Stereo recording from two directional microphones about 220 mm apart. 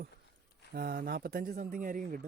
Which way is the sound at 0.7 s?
45° right (ahead or behind).